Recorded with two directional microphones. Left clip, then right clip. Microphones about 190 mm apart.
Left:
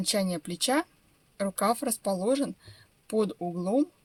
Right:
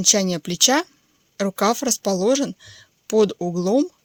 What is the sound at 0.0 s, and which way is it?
Speech, 40° right (ahead or behind).